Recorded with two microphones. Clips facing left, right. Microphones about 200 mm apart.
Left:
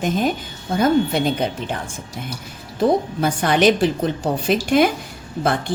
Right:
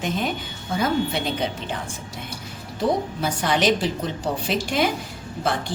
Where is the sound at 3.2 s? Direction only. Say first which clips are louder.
Left 5 dB; 55° left (ahead or behind).